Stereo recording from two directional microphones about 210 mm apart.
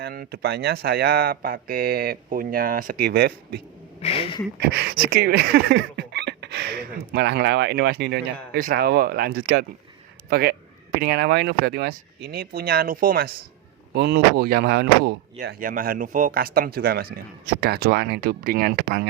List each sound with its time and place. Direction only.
0.0 s speech: 45° right (ahead or behind)
4.0 s speech: 25° left (ahead or behind)
4.6 s speech: 50° right (ahead or behind)